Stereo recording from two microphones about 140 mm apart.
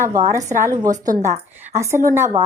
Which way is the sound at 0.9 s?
70° right (ahead or behind).